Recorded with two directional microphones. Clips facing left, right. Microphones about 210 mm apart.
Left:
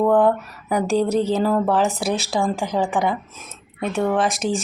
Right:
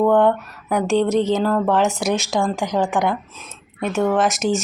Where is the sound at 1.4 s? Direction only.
5° left (ahead or behind).